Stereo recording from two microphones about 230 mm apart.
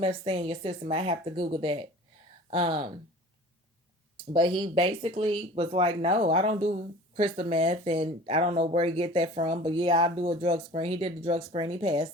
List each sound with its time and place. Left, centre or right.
0.0 s speech: right
4.3 s speech: right